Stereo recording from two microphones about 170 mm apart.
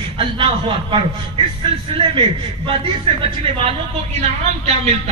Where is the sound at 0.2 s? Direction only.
30° right (ahead or behind).